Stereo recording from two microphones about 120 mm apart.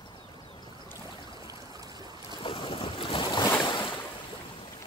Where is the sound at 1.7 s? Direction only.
30° right (ahead or behind).